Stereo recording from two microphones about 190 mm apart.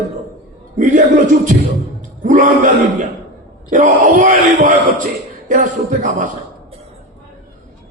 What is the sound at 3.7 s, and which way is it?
Speech, 40° right (ahead or behind).